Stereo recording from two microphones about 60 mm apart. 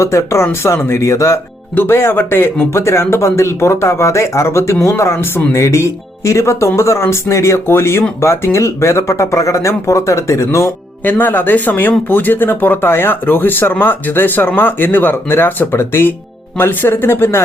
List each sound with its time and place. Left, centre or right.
0.0 s speech: left
1.7 s speech: left
11.0 s speech: left